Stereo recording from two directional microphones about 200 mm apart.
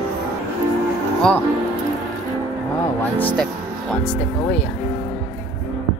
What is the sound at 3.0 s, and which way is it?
Speech, 10° left (ahead or behind).